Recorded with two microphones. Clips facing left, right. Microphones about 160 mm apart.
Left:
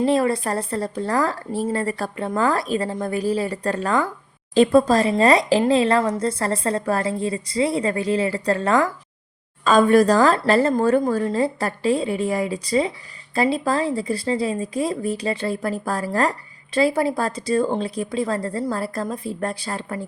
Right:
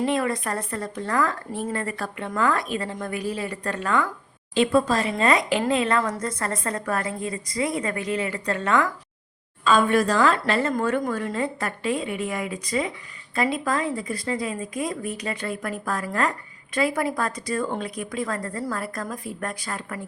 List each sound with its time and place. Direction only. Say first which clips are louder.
0.0 s speech: left 5 dB; 35° left (ahead or behind)